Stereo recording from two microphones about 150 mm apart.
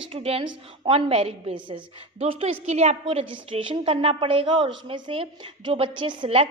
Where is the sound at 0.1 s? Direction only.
40° right (ahead or behind).